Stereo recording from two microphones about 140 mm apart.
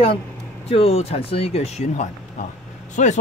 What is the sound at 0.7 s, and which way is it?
Speech, 45° left (ahead or behind).